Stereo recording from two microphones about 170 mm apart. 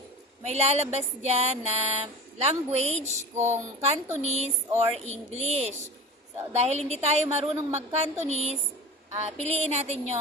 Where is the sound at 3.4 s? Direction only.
40° right (ahead or behind).